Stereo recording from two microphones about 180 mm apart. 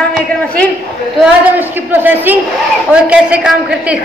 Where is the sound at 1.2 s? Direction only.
10° right (ahead or behind).